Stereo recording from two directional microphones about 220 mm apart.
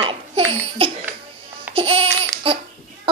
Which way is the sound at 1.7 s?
25° right (ahead or behind).